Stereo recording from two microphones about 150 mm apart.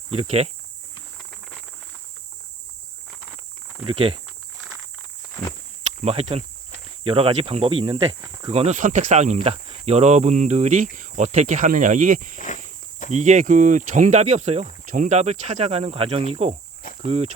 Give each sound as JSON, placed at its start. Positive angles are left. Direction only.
{"t": 0.1, "sound": "speech", "side_deg": -45}
{"t": 3.8, "sound": "speech", "side_deg": -40}
{"t": 7.0, "sound": "speech", "side_deg": -40}